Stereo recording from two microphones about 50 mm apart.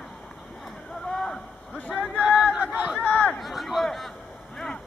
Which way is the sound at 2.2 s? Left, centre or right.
Centre.